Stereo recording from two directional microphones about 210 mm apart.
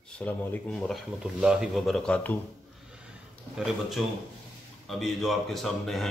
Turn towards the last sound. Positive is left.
turn(degrees=0)  # may be behind; listen again after turning